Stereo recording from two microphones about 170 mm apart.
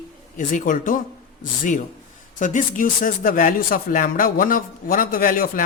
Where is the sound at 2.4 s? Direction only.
50° left (ahead or behind).